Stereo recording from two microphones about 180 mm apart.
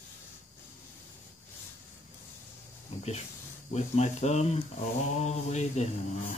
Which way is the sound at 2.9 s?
40° left (ahead or behind).